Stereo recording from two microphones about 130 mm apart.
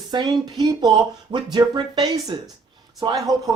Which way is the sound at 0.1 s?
35° right (ahead or behind).